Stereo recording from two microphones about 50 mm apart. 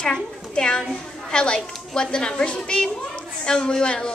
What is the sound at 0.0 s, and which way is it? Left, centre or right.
A woman's voice, centre.